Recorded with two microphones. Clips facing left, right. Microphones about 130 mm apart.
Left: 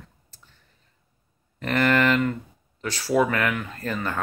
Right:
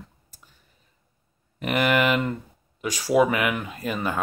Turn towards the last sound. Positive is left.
turn(degrees=-15)  # may be behind; listen again after turning